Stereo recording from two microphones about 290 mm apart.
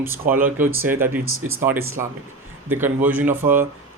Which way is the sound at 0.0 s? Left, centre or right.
Centre.